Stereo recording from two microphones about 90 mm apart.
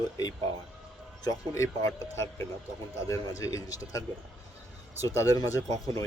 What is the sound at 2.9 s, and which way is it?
Speech, 40° left (ahead or behind).